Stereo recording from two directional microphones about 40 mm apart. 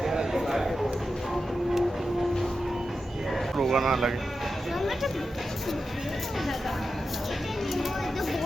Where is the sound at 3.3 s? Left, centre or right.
Centre.